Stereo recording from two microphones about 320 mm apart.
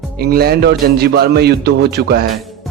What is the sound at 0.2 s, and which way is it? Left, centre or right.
A man's voice, right.